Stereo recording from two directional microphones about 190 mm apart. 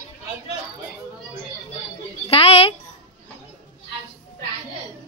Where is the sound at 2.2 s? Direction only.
30° left (ahead or behind).